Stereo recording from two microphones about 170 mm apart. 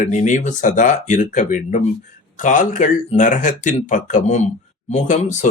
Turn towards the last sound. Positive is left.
turn(degrees=45)  # may be behind; listen again after turning